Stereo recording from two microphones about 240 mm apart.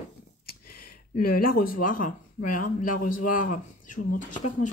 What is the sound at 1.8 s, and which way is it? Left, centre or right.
Speech, left.